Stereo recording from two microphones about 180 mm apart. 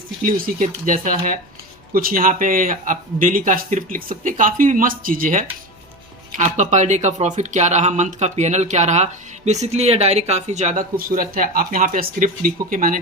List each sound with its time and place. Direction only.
0.2 s speech: 50° right (ahead or behind)